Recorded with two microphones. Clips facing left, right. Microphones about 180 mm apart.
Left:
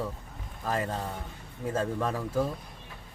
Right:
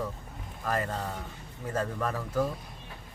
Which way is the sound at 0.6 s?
20° left (ahead or behind).